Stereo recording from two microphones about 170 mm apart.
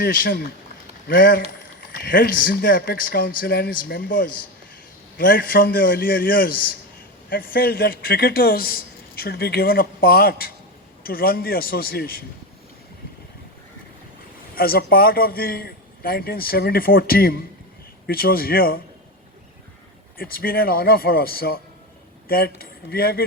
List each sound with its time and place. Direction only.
0.0 s a man's voice: 60° left (ahead or behind)
14.5 s a man's voice: 60° left (ahead or behind)
20.1 s a man's voice: 60° left (ahead or behind)